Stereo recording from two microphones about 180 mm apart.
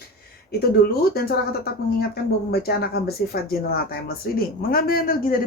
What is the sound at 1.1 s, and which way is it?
Speech, 60° left (ahead or behind).